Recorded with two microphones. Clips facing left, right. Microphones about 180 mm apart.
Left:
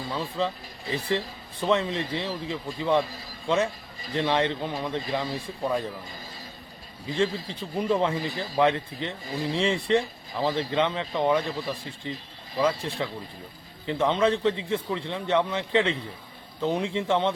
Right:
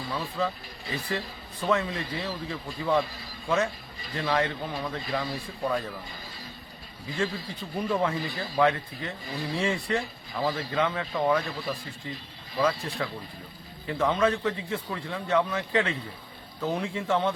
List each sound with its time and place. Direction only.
0.1 s speech: 25° left (ahead or behind)
7.1 s speech: 25° left (ahead or behind)